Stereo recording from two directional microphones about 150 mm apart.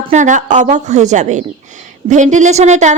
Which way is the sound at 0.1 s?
55° right (ahead or behind).